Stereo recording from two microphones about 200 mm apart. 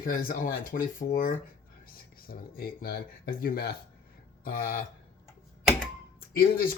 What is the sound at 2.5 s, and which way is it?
A man's voice, 50° left (ahead or behind).